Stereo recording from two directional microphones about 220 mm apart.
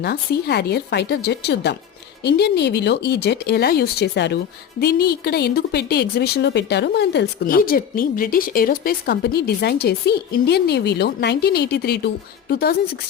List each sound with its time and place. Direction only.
0.0 s a woman's voice: 45° left (ahead or behind)